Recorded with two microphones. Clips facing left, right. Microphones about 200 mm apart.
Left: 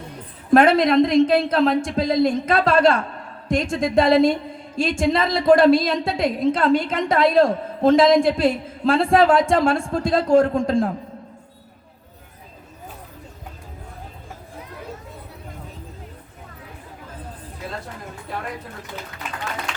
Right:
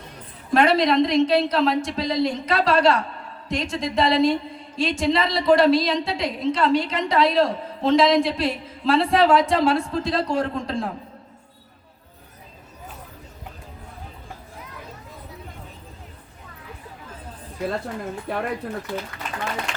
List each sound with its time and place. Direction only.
0.5 s a woman's voice: 50° left (ahead or behind)